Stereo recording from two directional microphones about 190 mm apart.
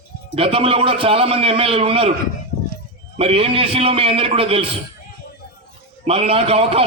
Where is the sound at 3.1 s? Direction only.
30° right (ahead or behind).